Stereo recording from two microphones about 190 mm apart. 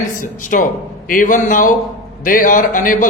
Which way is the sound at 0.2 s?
45° left (ahead or behind).